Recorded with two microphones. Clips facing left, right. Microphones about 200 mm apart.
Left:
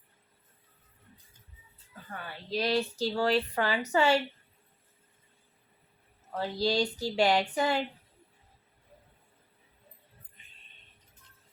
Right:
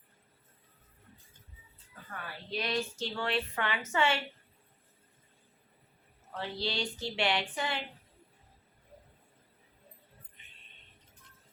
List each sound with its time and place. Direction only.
2.5 s a woman's voice: 35° left (ahead or behind)
6.3 s a woman's voice: 40° left (ahead or behind)